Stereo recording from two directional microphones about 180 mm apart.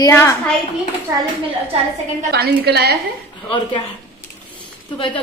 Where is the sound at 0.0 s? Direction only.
15° left (ahead or behind).